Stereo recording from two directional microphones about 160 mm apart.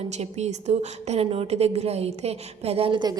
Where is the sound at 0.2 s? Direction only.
40° right (ahead or behind).